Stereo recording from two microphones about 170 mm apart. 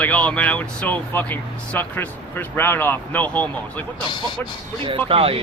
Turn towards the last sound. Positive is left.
turn(degrees=-35)  # may be behind; listen again after turning